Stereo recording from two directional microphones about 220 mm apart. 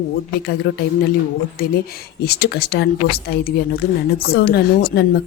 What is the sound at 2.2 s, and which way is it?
A woman's voice, 45° left (ahead or behind).